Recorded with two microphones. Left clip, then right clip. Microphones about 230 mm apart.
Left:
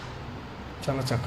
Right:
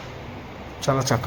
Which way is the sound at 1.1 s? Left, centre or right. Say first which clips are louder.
Right 7 dB; centre.